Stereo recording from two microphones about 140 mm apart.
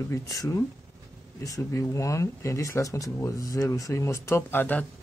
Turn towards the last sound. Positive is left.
turn(degrees=15)  # may be behind; listen again after turning